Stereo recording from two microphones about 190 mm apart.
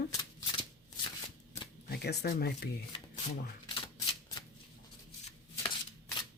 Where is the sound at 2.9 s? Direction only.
30° left (ahead or behind).